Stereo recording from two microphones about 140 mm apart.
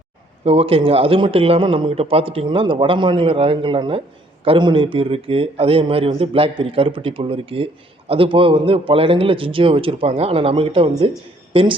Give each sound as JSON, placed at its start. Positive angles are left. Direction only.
{"t": 0.4, "sound": "a man's voice", "side_deg": -45}